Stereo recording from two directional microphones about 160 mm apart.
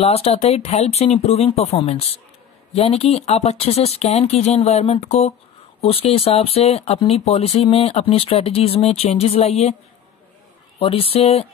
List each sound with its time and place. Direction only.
0.0 s speech: 40° left (ahead or behind)
10.8 s speech: 35° left (ahead or behind)